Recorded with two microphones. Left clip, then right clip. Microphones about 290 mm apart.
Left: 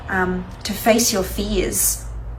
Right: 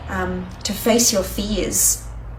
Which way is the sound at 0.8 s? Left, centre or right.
Centre.